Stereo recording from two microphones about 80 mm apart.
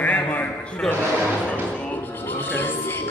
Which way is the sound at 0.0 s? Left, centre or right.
Centre.